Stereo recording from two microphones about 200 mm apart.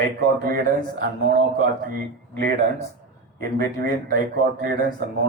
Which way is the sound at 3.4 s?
50° right (ahead or behind).